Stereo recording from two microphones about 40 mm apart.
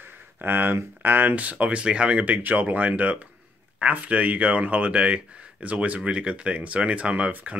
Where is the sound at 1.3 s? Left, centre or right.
Right.